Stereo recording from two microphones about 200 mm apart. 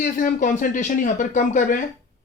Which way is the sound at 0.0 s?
45° left (ahead or behind).